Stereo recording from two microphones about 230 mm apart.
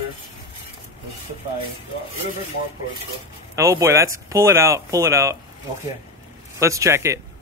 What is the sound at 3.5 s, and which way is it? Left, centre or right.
Speech, centre.